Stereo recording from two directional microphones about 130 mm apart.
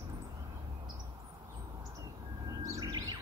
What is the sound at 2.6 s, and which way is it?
Bird, 25° right (ahead or behind).